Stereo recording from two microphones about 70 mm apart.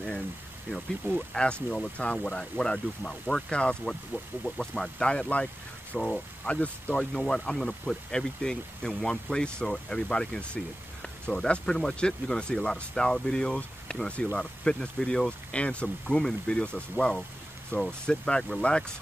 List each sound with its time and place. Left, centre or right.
1.3 s speech: centre